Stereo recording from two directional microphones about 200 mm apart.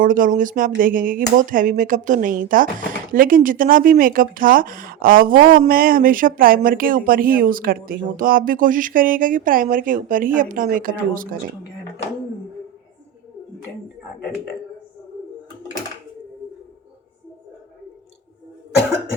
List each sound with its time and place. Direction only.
0.0 s speech: 40° right (ahead or behind)